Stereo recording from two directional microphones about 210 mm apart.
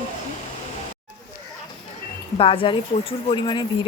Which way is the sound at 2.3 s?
25° left (ahead or behind).